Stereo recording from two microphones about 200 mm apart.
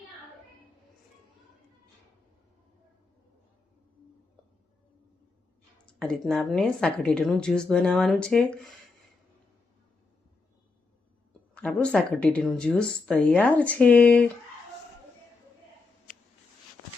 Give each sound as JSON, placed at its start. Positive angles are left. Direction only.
{"t": 5.8, "sound": "a woman's voice", "side_deg": 5}
{"t": 11.5, "sound": "a woman's voice", "side_deg": 5}